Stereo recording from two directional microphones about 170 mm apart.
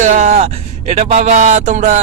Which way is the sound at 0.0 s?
45° right (ahead or behind).